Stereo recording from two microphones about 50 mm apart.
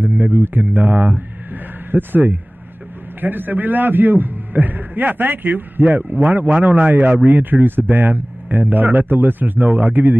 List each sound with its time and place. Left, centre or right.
0.0 s a man's voice: right